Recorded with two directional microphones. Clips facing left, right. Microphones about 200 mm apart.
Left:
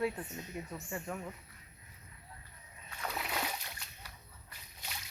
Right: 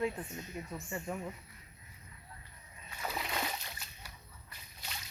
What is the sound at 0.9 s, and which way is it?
Speech, 5° right (ahead or behind).